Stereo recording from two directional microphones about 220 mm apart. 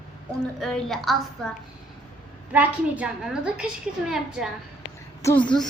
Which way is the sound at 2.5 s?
5° right (ahead or behind).